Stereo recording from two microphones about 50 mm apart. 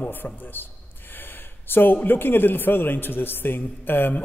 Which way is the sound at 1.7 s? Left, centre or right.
Left.